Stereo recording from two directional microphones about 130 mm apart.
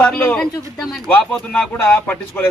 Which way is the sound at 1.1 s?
15° left (ahead or behind).